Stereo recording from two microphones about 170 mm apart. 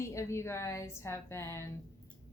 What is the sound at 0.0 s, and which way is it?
A woman's voice, 15° left (ahead or behind).